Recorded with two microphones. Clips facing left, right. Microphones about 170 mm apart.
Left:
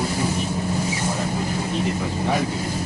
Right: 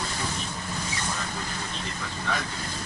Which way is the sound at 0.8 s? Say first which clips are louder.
Left 8 dB; 5° left (ahead or behind).